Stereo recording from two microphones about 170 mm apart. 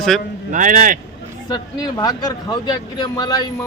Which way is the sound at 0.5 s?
50° right (ahead or behind).